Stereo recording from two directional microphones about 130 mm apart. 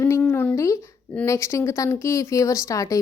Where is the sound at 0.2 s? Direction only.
10° left (ahead or behind).